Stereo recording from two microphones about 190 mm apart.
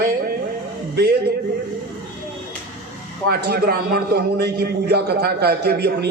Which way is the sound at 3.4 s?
55° right (ahead or behind).